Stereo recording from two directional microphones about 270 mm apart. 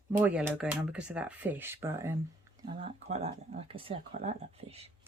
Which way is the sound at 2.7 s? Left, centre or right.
Centre.